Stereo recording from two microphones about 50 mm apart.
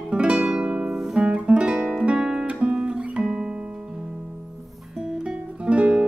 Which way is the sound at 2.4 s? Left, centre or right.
Right.